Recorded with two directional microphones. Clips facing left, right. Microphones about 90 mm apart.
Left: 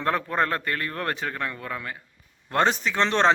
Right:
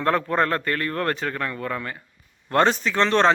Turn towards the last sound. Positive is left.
turn(degrees=20)  # may be behind; listen again after turning